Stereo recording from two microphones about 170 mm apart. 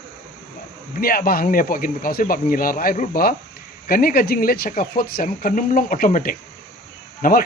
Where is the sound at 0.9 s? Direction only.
60° left (ahead or behind).